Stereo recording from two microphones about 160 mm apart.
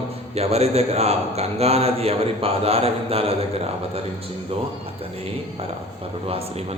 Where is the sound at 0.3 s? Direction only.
40° right (ahead or behind).